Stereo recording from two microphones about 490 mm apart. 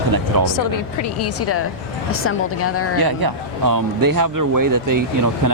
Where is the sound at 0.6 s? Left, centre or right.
Left.